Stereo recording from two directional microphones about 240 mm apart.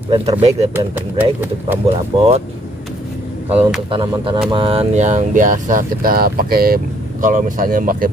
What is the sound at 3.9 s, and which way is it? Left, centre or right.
Speech, right.